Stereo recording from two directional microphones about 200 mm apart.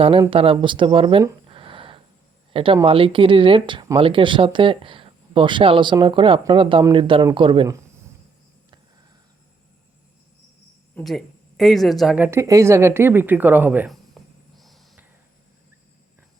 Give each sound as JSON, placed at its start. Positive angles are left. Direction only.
{"t": 0.0, "sound": "speech", "side_deg": -25}
{"t": 1.5, "sound": "a sound", "side_deg": -25}
{"t": 2.5, "sound": "speech", "side_deg": -25}
{"t": 10.9, "sound": "speech", "side_deg": 0}